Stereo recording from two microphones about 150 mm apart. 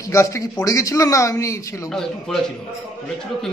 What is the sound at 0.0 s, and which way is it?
A man's voice, 20° left (ahead or behind).